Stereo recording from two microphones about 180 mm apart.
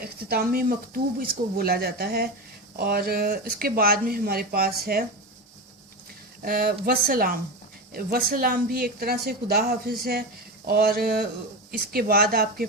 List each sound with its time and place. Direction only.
0.0 s speech: 55° right (ahead or behind)
6.4 s speech: 55° right (ahead or behind)